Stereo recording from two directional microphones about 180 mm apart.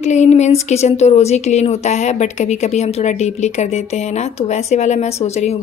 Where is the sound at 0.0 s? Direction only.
40° left (ahead or behind).